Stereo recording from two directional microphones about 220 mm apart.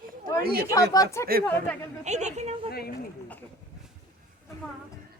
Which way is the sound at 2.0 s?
30° right (ahead or behind).